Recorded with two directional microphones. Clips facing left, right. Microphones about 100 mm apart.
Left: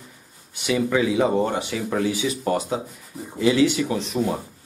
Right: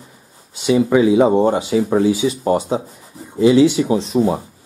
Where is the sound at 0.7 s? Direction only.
25° right (ahead or behind).